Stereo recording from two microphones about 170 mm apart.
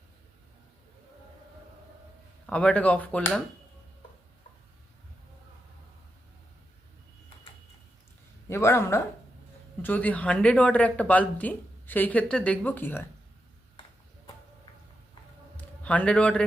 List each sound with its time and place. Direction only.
2.5 s speech: 5° left (ahead or behind)
8.4 s speech: 15° left (ahead or behind)
15.5 s a sound: 10° left (ahead or behind)